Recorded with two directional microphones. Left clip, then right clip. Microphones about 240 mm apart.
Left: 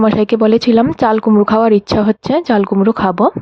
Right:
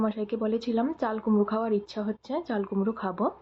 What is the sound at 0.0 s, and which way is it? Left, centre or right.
Speech, left.